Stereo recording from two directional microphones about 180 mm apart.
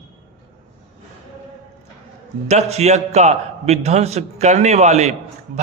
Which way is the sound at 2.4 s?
35° right (ahead or behind).